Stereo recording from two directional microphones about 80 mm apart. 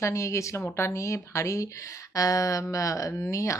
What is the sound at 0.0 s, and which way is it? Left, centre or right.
A woman's voice, left.